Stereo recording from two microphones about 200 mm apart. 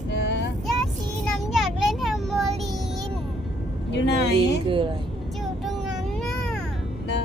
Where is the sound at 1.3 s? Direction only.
Centre (ahead or behind).